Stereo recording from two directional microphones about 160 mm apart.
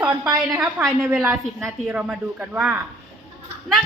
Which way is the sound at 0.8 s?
10° right (ahead or behind).